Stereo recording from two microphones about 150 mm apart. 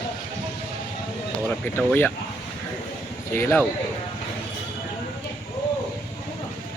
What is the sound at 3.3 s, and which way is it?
Speech, 15° left (ahead or behind).